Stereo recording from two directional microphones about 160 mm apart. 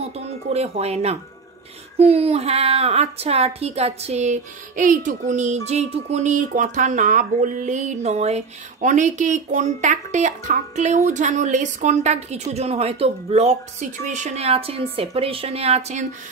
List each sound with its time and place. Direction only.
0.0 s music: 40° right (ahead or behind)
2.0 s a woman's voice: 40° right (ahead or behind)